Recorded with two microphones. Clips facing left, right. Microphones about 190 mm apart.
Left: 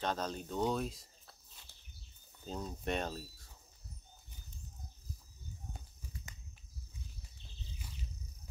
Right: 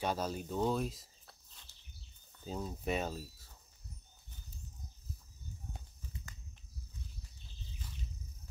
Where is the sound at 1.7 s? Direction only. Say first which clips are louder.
Left 4 dB; 60° left (ahead or behind).